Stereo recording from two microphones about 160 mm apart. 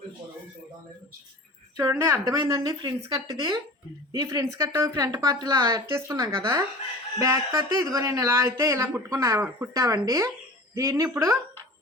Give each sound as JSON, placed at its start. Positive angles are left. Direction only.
{"t": 1.7, "sound": "speech", "side_deg": -20}